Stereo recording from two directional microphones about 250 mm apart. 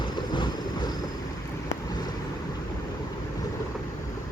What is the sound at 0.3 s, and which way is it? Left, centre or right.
Boat, centre.